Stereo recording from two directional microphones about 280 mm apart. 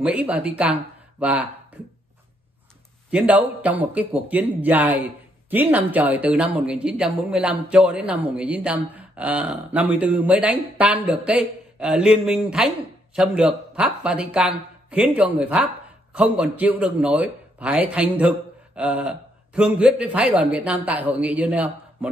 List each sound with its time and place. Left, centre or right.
0.0 s speech: centre
3.1 s speech: centre